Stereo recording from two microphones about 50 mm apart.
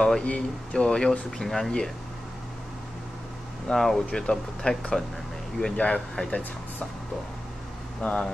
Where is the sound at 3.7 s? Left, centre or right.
Centre.